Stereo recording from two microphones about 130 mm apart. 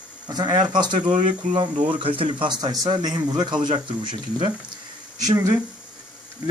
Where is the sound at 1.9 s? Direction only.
45° right (ahead or behind).